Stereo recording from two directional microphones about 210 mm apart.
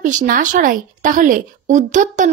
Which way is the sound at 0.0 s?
40° right (ahead or behind).